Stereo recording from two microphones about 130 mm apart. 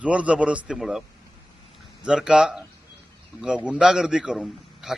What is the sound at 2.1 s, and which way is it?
Speech, 5° right (ahead or behind).